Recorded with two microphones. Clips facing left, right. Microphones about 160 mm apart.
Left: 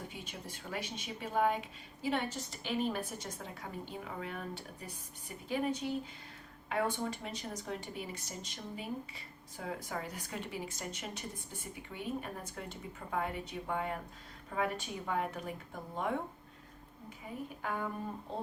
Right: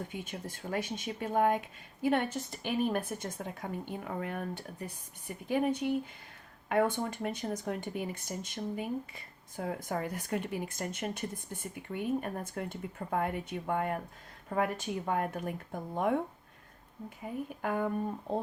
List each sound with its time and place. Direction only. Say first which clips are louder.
0.1 s a woman's voice: right 6 dB; 50° right (ahead or behind)
17.6 s speech: right 6 dB; 50° right (ahead or behind)